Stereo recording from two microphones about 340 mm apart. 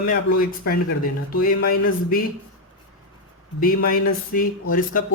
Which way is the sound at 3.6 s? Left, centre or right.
Left.